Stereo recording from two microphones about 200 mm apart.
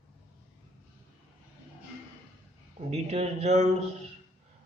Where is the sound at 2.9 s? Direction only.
35° right (ahead or behind).